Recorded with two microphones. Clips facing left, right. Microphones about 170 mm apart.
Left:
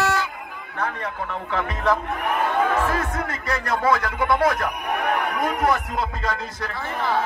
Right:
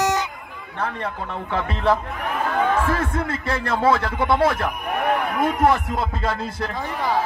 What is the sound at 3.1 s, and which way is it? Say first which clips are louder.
A man's voice: right 2 dB; 30° right (ahead or behind).